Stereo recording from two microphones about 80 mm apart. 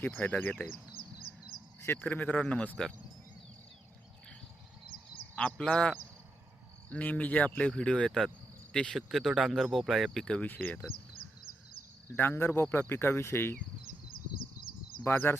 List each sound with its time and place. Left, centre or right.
0.0 s speech: left
2.0 s speech: centre
5.4 s speech: centre
6.9 s speech: centre
9.0 s speech: centre
10.2 s speech: centre
10.5 s speech: left
12.1 s speech: left
15.0 s speech: left